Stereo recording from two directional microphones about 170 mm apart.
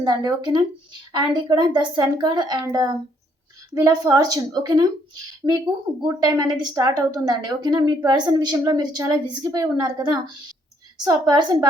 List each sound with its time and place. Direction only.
0.0 s a woman's voice: 25° right (ahead or behind)